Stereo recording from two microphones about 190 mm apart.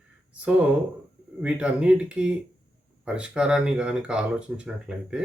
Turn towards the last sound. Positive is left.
turn(degrees=-5)  # may be behind; listen again after turning